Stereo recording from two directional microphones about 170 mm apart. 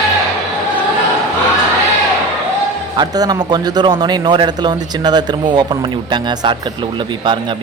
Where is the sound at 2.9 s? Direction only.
25° right (ahead or behind).